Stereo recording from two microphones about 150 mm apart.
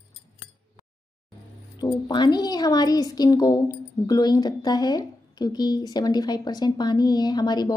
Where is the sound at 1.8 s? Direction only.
30° left (ahead or behind).